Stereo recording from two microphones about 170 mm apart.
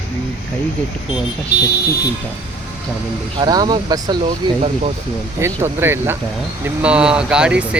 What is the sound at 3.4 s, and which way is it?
Speech, 25° right (ahead or behind).